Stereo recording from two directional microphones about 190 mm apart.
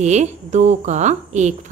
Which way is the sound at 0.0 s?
35° right (ahead or behind).